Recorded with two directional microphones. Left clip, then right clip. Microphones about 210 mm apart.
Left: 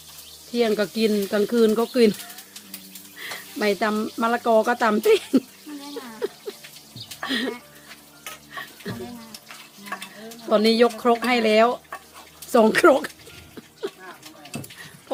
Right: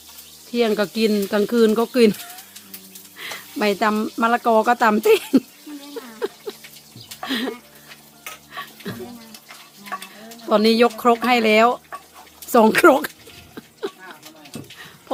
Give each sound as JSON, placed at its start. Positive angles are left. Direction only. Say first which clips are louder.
{"t": 0.5, "sound": "speech", "louder": "right 2 dB", "side_deg": -30}
{"t": 3.2, "sound": "speech", "louder": "right 3 dB", "side_deg": -30}
{"t": 6.1, "sound": "a sound", "louder": "right 3 dB", "side_deg": -30}
{"t": 7.3, "sound": "speech", "louder": "right 1 dB", "side_deg": -25}
{"t": 9.9, "sound": "stir", "louder": "right 3 dB", "side_deg": 5}
{"t": 10.5, "sound": "speech", "louder": "right 2 dB", "side_deg": -30}